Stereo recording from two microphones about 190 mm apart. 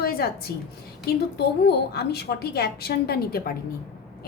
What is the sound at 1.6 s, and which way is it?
A woman's voice, 55° left (ahead or behind).